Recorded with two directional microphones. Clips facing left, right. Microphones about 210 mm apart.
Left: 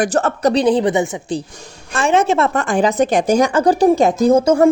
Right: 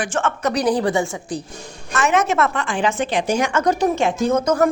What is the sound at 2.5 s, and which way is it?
Speech, 45° left (ahead or behind).